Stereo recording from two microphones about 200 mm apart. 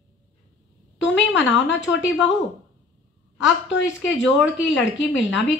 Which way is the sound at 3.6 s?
65° left (ahead or behind).